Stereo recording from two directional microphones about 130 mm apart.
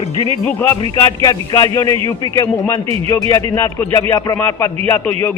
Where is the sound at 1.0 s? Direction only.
30° left (ahead or behind).